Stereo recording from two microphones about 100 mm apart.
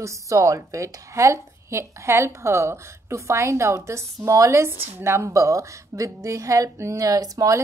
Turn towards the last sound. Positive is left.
turn(degrees=-35)  # may be behind; listen again after turning